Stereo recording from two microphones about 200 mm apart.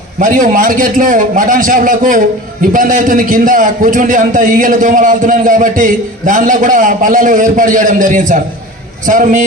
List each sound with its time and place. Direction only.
0.2 s a man's voice: 40° right (ahead or behind)